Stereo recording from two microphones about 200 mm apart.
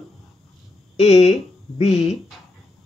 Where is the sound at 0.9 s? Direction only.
30° left (ahead or behind).